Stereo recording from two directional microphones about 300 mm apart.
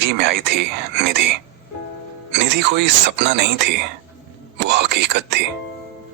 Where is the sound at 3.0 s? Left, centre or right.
Right.